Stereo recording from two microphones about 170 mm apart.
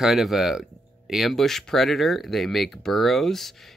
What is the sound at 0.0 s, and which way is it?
Speech, centre (ahead or behind).